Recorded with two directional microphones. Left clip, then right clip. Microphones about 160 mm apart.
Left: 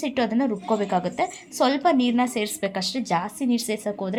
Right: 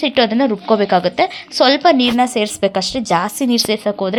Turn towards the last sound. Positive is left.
turn(degrees=-20)  # may be behind; listen again after turning